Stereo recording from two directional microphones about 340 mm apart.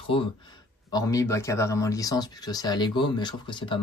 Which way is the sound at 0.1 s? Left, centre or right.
Centre.